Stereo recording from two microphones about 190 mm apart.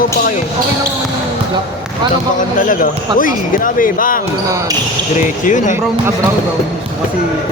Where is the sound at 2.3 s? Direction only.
45° left (ahead or behind).